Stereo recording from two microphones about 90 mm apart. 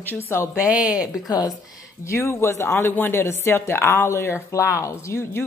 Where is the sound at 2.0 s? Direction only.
30° left (ahead or behind).